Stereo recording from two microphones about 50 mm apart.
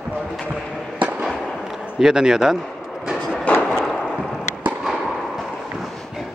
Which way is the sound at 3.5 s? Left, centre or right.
Left.